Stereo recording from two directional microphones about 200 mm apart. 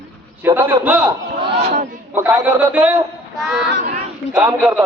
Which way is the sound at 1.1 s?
25° right (ahead or behind).